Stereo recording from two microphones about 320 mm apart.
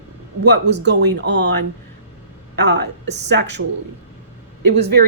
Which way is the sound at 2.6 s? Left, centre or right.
Right.